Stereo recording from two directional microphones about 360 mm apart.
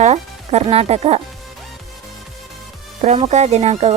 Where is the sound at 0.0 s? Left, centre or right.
Centre.